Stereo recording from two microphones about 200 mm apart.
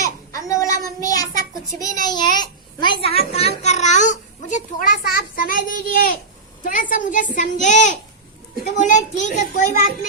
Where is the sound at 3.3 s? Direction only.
30° left (ahead or behind).